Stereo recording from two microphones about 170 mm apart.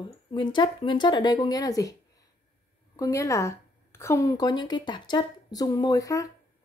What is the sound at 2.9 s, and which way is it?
A woman's voice, 20° left (ahead or behind).